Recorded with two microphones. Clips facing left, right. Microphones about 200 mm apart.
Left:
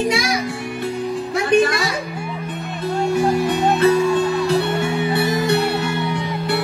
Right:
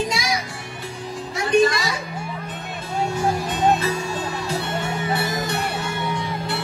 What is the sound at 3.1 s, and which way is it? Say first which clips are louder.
Music: left 8 dB; 60° left (ahead or behind).